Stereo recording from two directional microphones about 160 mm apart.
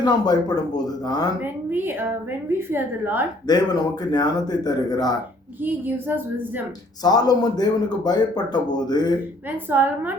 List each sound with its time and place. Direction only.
0.0 s a man's voice: 25° left (ahead or behind)
1.7 s a woman's voice: 15° right (ahead or behind)
3.4 s a man's voice: 25° left (ahead or behind)
5.6 s a woman's voice: 10° right (ahead or behind)
7.0 s a man's voice: 25° left (ahead or behind)
9.6 s a woman's voice: 10° right (ahead or behind)